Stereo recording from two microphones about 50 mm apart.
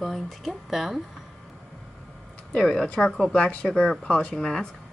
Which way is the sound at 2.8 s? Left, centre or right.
Centre.